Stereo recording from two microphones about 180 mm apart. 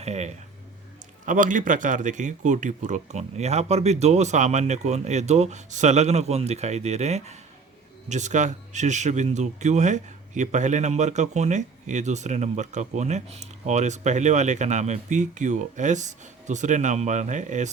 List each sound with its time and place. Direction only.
0.0 s speech: 40° right (ahead or behind)